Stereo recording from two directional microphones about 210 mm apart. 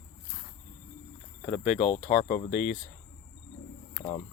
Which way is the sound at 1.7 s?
35° left (ahead or behind).